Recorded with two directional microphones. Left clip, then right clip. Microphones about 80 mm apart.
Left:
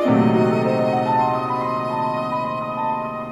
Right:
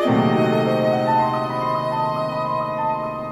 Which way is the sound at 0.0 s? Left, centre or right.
Right.